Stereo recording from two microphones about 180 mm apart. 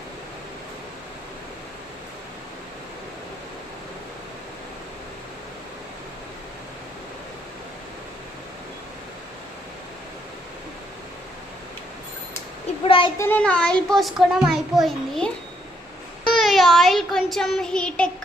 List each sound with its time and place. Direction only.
12.8 s a sound: 30° left (ahead or behind)
13.2 s a child's voice: 10° left (ahead or behind)
16.3 s child singing: centre (ahead or behind)